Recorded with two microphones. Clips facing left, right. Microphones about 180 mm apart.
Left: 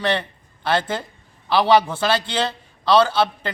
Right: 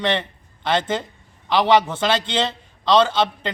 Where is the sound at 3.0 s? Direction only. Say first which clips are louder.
Even; 10° left (ahead or behind).